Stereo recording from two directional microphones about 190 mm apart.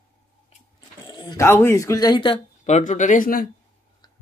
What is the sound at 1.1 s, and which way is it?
Speech, 20° left (ahead or behind).